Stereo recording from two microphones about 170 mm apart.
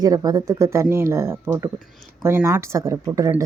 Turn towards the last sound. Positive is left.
turn(degrees=-20)  # may be behind; listen again after turning